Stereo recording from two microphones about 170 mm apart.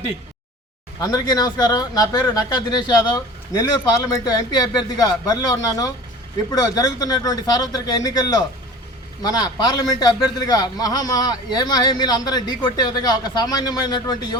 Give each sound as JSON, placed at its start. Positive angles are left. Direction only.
{"t": 0.9, "sound": "a man's voice", "side_deg": 25}